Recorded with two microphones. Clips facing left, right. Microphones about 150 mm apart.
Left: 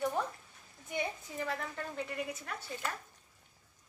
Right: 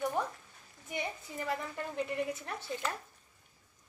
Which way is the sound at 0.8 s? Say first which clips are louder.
Left 1 dB; 5° right (ahead or behind).